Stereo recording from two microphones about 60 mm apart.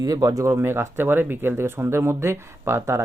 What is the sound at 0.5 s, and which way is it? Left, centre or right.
Speech, right.